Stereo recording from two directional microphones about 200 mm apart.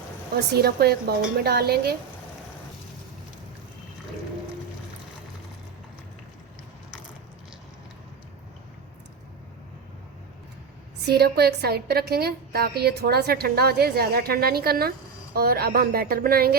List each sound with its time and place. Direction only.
0.3 s a woman's voice: 50° right (ahead or behind)
11.0 s a woman's voice: 55° right (ahead or behind)